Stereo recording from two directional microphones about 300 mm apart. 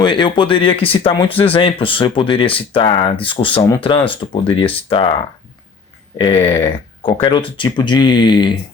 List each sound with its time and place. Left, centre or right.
0.0 s speech: centre
6.1 s speech: centre